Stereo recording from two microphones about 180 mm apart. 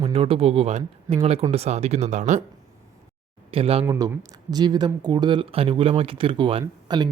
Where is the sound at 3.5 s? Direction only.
35° right (ahead or behind).